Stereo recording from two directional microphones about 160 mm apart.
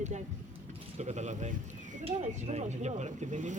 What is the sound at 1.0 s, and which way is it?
Speech, 45° right (ahead or behind).